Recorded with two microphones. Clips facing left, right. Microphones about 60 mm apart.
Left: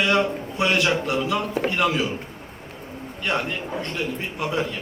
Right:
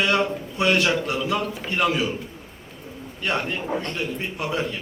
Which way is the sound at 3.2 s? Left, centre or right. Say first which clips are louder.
Even; centre.